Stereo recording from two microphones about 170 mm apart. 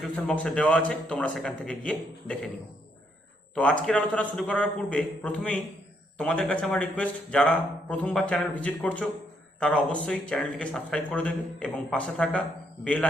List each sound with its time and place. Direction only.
0.0 s a man's voice: 5° left (ahead or behind)
3.5 s a man's voice: 5° left (ahead or behind)